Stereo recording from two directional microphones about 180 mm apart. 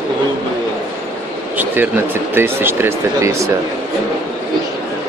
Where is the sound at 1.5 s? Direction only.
10° right (ahead or behind).